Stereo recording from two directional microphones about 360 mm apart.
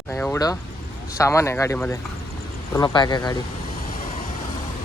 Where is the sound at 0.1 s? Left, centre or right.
Centre.